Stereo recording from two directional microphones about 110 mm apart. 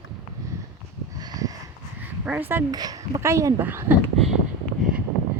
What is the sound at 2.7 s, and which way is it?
Speech, 35° right (ahead or behind).